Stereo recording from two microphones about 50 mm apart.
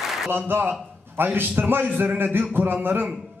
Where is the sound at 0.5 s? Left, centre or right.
Right.